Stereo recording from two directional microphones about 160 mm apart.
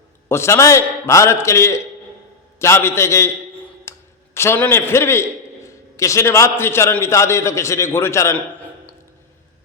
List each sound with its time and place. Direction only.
0.3 s a man's voice: 15° left (ahead or behind)
3.9 s a sound: 15° left (ahead or behind)
4.4 s a man's voice: 15° left (ahead or behind)